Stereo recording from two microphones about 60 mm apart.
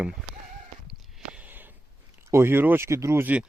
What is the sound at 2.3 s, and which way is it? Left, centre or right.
Speech, right.